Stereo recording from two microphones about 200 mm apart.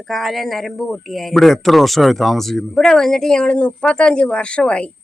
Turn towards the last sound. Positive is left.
turn(degrees=5)  # may be behind; listen again after turning